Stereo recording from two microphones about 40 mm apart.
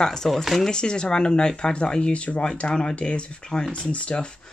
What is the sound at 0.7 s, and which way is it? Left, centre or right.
Speech, left.